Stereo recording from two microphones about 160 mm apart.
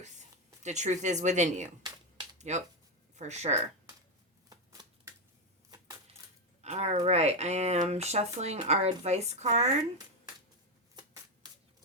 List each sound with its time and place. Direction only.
0.0 s speech: 45° right (ahead or behind)
4.4 s shuffling cards: 25° right (ahead or behind)
6.6 s speech: 45° right (ahead or behind)